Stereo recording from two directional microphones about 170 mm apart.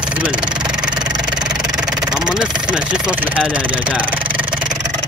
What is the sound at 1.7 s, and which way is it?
Vehicle, 5° right (ahead or behind).